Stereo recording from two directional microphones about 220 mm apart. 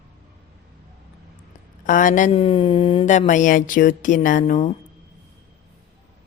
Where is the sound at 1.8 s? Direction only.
35° left (ahead or behind).